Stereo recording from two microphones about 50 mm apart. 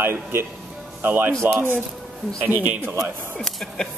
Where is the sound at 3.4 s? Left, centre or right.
Centre.